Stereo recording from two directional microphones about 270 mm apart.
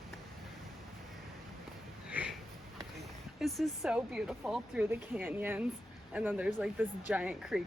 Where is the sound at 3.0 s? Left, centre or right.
Centre.